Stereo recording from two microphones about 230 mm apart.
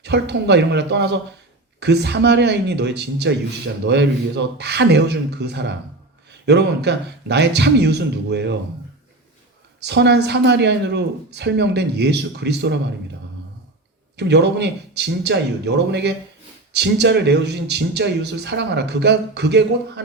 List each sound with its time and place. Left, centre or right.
0.0 s speech: right
9.8 s speech: right
14.2 s speech: right